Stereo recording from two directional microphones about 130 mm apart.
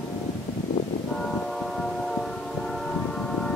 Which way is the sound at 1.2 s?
5° left (ahead or behind).